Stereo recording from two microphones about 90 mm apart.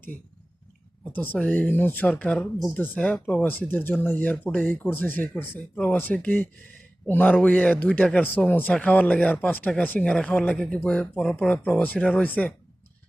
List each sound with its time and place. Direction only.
1.1 s speech: 20° left (ahead or behind)